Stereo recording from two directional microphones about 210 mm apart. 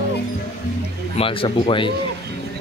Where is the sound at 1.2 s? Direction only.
25° left (ahead or behind).